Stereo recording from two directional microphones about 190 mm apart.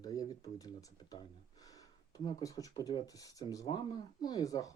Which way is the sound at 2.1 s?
20° left (ahead or behind).